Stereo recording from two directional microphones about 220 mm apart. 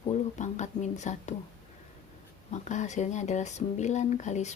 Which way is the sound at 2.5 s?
30° left (ahead or behind).